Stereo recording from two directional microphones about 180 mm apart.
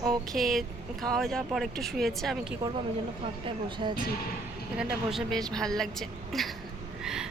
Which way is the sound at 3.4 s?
25° right (ahead or behind).